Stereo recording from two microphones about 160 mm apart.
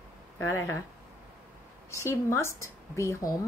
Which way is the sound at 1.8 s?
20° left (ahead or behind).